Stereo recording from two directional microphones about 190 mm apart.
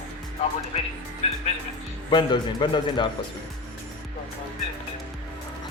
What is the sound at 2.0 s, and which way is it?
Speech, 25° left (ahead or behind).